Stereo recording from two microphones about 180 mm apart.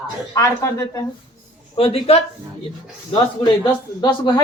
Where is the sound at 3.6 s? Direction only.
25° left (ahead or behind).